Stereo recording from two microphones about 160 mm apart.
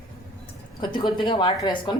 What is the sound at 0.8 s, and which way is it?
A woman's voice, 30° left (ahead or behind).